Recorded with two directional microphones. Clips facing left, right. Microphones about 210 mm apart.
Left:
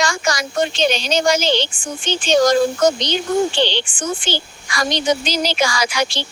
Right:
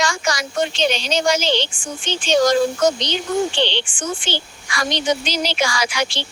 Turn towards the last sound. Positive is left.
turn(degrees=40)  # may be behind; listen again after turning